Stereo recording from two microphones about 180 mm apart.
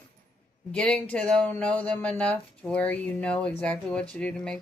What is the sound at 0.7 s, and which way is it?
Speech, 5° left (ahead or behind).